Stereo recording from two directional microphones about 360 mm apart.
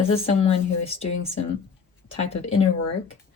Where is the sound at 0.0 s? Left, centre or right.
Centre.